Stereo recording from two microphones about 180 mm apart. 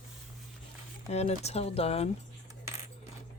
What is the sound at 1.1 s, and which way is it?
Speech, 35° left (ahead or behind).